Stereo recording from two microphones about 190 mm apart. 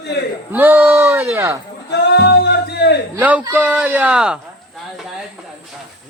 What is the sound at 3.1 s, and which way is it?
Speech, 10° right (ahead or behind).